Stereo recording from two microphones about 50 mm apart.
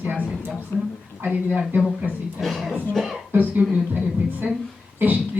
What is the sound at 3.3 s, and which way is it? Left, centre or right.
A woman's voice, right.